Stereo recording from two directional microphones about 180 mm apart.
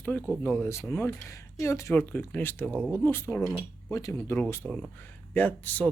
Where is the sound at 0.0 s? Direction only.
5° left (ahead or behind).